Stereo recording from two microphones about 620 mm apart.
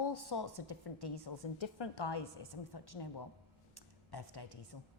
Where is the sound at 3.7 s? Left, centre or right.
Left.